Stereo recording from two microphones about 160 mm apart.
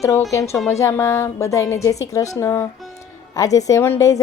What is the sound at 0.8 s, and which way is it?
A woman's voice, 15° left (ahead or behind).